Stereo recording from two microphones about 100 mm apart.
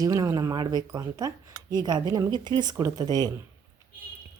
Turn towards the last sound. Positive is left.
turn(degrees=-40)  # may be behind; listen again after turning